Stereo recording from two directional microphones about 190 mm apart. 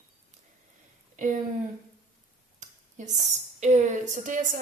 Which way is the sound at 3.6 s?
40° right (ahead or behind).